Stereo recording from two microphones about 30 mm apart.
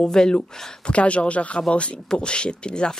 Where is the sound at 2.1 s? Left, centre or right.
Left.